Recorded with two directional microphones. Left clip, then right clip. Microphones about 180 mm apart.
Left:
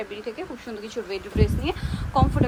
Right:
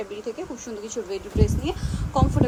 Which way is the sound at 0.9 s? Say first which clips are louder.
Even; 15° right (ahead or behind).